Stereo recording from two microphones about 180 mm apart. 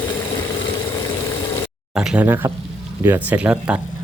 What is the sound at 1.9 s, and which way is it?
Speech, 5° right (ahead or behind).